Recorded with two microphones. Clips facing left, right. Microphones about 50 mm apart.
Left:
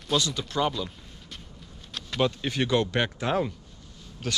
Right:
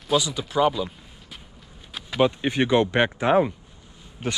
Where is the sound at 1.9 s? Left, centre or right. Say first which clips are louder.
Right 5 dB; centre.